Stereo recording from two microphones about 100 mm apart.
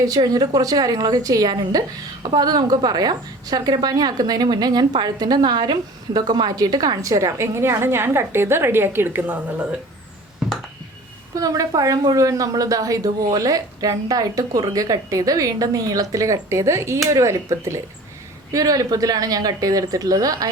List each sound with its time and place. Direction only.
0.0 s a woman's voice: 40° right (ahead or behind); by 9.4 s 20° right (ahead or behind)
11.3 s a woman's voice: 40° right (ahead or behind)